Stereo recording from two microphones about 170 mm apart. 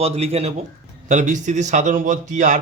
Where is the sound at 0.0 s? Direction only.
35° right (ahead or behind).